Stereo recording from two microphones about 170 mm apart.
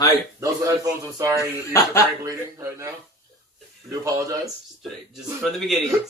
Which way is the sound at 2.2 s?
20° right (ahead or behind).